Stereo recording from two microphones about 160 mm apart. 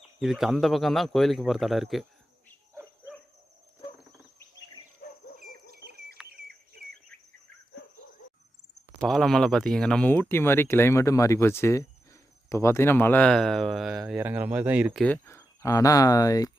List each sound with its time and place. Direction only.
0.2 s a man's voice: centre (ahead or behind)
6.2 s a sound: 5° right (ahead or behind)
9.0 s speech: centre (ahead or behind)
14.2 s speech: 10° right (ahead or behind)
14.9 s speech: 10° left (ahead or behind)